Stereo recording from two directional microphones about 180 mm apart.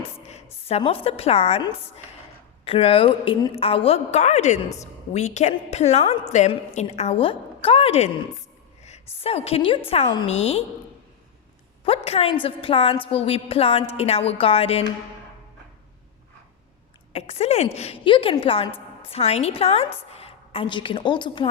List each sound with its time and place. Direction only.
0.2 s a sound: 35° left (ahead or behind)
0.7 s a woman's voice: 30° left (ahead or behind)
11.9 s a woman's voice: 35° left (ahead or behind)
17.1 s a woman's voice: 35° left (ahead or behind)